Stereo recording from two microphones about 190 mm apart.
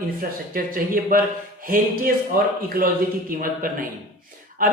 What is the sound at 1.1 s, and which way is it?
Speech, 50° right (ahead or behind).